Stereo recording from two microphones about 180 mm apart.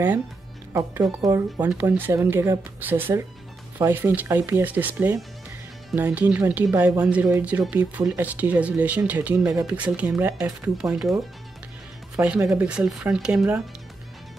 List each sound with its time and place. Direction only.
0.7 s speech: 20° right (ahead or behind)
7.0 s speech: 5° right (ahead or behind)
12.4 s speech: 15° right (ahead or behind)
12.6 s speech: 5° right (ahead or behind)